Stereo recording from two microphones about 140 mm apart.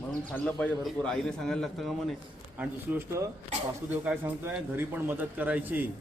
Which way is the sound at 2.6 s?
15° right (ahead or behind).